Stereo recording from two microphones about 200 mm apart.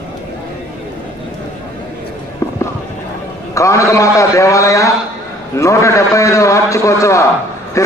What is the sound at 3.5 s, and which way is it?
A man's voice, 15° left (ahead or behind).